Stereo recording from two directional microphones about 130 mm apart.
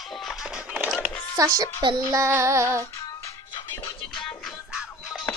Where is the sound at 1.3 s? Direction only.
30° right (ahead or behind).